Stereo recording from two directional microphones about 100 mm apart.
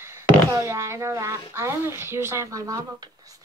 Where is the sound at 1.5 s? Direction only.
25° right (ahead or behind).